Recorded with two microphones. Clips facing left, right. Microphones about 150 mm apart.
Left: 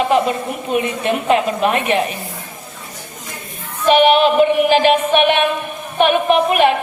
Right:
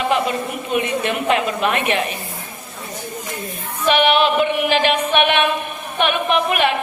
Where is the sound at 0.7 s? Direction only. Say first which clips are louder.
Left 2 dB; 45° left (ahead or behind).